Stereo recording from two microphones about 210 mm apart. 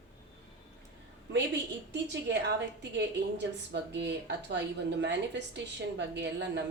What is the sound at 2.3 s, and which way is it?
Speech, 55° right (ahead or behind).